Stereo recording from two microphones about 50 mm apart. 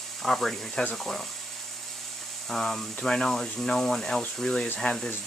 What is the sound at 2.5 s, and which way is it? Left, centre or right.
Speech, centre.